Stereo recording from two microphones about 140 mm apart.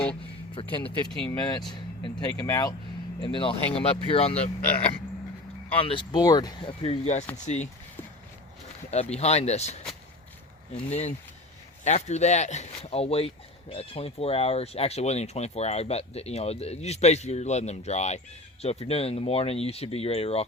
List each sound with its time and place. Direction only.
0.5 s speech: 35° left (ahead or behind)
1.0 s speech: 5° left (ahead or behind)
1.3 s speech: 30° left (ahead or behind); by 4.5 s 45° left (ahead or behind)
5.7 s speech: 40° left (ahead or behind)
7.0 s speech: 55° left (ahead or behind)
8.9 s speech: 50° left (ahead or behind)